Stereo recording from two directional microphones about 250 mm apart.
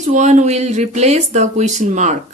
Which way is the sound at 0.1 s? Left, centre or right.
Right.